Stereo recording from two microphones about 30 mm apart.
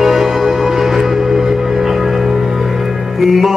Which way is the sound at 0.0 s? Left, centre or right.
Centre.